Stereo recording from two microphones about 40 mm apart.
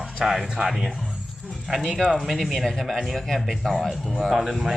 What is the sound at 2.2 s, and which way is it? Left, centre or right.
A man's voice, centre.